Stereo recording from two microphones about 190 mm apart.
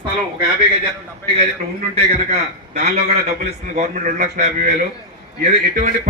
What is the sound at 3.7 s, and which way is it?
A man's voice, 40° right (ahead or behind).